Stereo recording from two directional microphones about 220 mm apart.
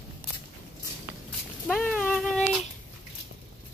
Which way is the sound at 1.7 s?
5° left (ahead or behind).